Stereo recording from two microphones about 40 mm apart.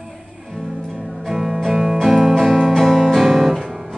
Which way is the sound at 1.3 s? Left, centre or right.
Centre.